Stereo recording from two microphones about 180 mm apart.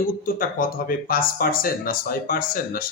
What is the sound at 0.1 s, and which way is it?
A man's voice, 50° left (ahead or behind).